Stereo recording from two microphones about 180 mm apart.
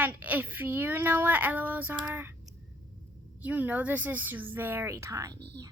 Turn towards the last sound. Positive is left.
turn(degrees=-65)  # may be behind; listen again after turning